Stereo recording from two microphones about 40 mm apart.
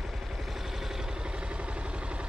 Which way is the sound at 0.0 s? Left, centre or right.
Centre.